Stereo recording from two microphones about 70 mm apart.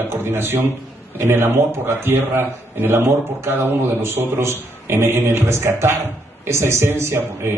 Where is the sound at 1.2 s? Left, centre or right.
Right.